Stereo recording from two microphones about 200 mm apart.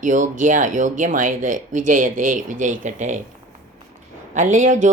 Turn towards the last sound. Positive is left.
turn(degrees=-40)  # may be behind; listen again after turning